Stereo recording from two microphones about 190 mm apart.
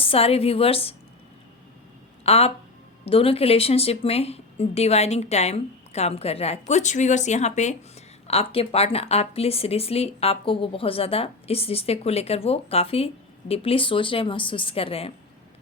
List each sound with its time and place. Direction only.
0.0 s speech: 30° left (ahead or behind)
2.2 s speech: 30° left (ahead or behind)